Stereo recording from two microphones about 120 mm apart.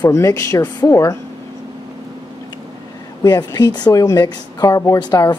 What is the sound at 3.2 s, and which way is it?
A woman's voice, 35° left (ahead or behind).